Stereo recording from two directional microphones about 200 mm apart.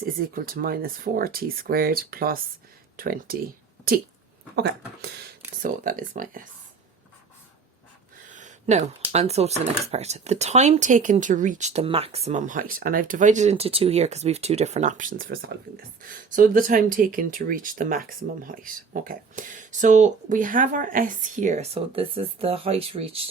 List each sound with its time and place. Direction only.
0.0 s speech: 45° right (ahead or behind)
5.6 s speech: 45° right (ahead or behind)
8.3 s a sound: 40° right (ahead or behind)
9.1 s speech: 30° right (ahead or behind)